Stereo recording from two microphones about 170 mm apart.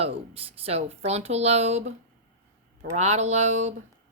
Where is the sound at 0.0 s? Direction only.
35° right (ahead or behind).